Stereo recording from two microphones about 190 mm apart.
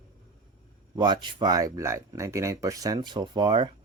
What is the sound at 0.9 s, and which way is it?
Speech, 25° right (ahead or behind).